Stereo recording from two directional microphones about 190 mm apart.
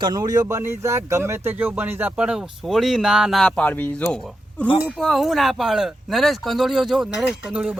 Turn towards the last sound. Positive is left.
turn(degrees=-5)  # may be behind; listen again after turning